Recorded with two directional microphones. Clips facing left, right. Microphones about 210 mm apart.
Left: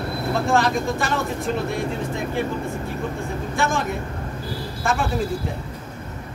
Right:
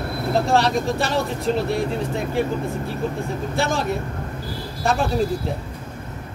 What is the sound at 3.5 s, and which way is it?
Speech, 35° right (ahead or behind).